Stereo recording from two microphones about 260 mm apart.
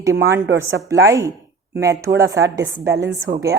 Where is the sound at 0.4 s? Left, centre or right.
Right.